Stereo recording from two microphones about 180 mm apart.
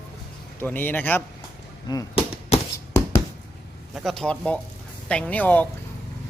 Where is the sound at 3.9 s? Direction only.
Centre (ahead or behind).